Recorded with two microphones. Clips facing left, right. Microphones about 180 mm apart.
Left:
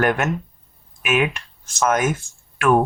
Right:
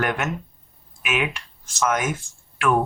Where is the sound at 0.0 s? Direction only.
50° left (ahead or behind).